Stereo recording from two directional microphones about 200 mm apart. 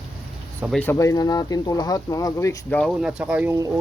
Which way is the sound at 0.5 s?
5° right (ahead or behind).